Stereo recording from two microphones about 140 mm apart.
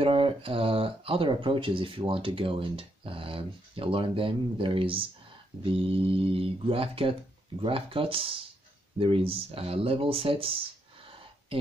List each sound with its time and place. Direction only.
0.0 s speech: 40° right (ahead or behind)